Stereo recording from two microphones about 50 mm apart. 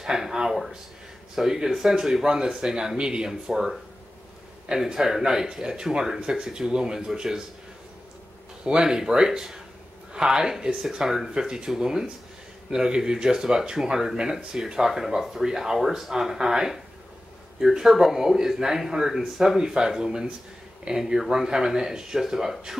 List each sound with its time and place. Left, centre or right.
0.0 s speech: centre
3.4 s speech: centre
8.6 s speech: centre